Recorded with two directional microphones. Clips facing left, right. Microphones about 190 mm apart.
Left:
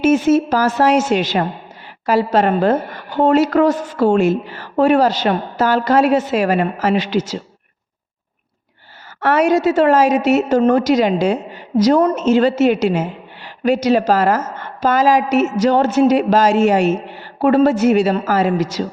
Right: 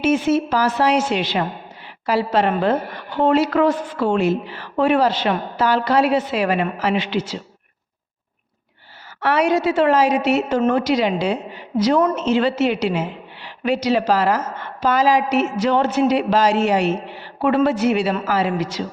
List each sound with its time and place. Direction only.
0.0 s a woman's voice: 45° left (ahead or behind)
9.2 s a woman's voice: 45° left (ahead or behind)